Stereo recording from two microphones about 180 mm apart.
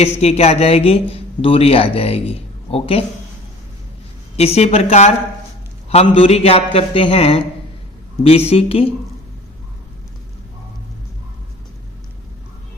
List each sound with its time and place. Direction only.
0.0 s a man's voice: 35° left (ahead or behind)
4.4 s a man's voice: 35° left (ahead or behind)
8.4 s a man's voice: 35° left (ahead or behind)